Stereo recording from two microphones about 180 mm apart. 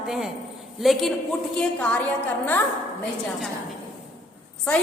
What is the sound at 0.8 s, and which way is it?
A man's voice, centre (ahead or behind).